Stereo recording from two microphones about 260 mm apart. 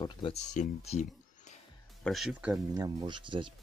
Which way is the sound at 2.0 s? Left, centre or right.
Centre.